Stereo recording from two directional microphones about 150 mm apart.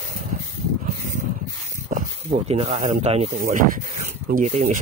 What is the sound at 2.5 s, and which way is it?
Speech, 40° right (ahead or behind).